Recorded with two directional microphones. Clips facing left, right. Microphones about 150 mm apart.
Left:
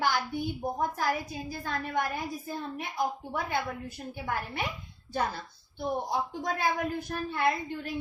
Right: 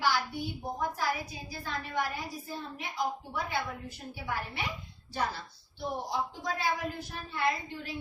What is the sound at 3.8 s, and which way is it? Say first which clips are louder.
Speech: left 3 dB; 50° left (ahead or behind).